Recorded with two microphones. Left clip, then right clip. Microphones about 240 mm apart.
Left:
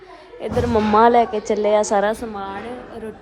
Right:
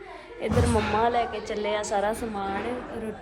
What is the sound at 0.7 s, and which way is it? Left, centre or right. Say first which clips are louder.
A woman's voice: left 12 dB; left.